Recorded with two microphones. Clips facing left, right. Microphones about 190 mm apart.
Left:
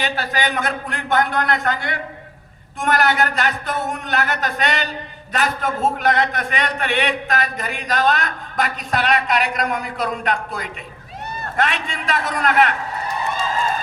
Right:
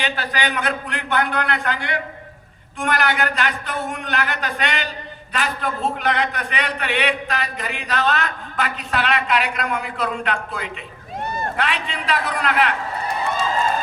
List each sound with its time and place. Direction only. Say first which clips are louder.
0.0 s a man's voice: left 2 dB; 40° left (ahead or behind)